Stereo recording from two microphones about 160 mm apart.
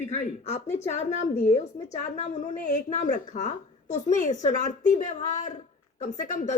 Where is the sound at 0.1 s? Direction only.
45° left (ahead or behind).